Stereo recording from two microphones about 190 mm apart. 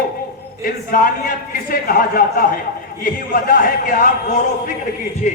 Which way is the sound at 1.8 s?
50° left (ahead or behind).